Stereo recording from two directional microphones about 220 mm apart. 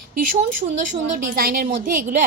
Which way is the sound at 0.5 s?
35° right (ahead or behind).